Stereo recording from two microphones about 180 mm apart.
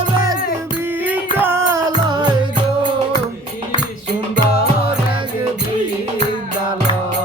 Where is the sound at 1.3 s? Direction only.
10° right (ahead or behind).